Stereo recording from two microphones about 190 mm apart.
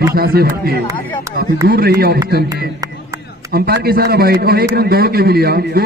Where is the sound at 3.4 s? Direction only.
55° right (ahead or behind).